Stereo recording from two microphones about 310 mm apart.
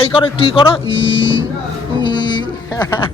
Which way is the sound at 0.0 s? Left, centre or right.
Centre.